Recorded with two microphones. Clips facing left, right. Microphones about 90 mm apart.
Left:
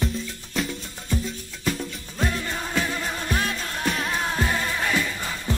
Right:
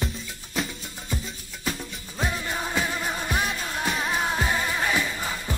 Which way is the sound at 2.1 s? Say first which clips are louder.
Left 1 dB; 10° right (ahead or behind).